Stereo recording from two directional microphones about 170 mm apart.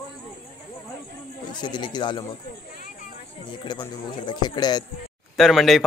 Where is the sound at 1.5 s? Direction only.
25° left (ahead or behind).